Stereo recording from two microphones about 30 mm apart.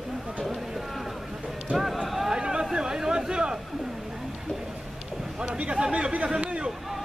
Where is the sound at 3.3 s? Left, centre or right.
Right.